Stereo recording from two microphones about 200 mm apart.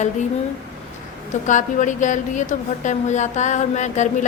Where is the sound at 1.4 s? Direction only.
40° left (ahead or behind).